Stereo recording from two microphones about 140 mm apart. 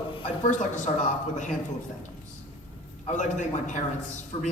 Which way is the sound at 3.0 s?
60° left (ahead or behind).